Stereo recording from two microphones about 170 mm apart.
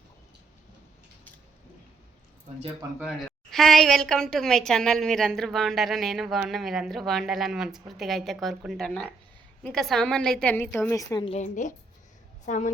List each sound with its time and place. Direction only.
3.0 s a woman's voice: centre (ahead or behind); by 11.3 s 20° left (ahead or behind)
11.3 s a woman's voice: 45° left (ahead or behind)